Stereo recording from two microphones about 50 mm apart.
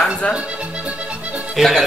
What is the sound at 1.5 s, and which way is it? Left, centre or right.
Speech, centre.